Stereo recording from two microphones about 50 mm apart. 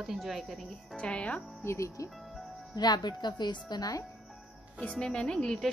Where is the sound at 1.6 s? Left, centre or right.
Left.